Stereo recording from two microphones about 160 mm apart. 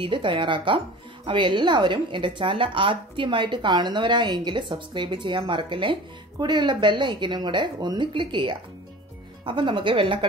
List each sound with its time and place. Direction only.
0.0 s a woman's voice: 30° right (ahead or behind)